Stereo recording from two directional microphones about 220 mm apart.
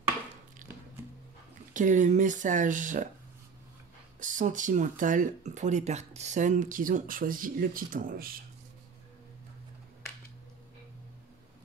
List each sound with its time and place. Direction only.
0.6 s music: 35° right (ahead or behind)
1.7 s speech: 35° right (ahead or behind)
4.2 s speech: 35° right (ahead or behind)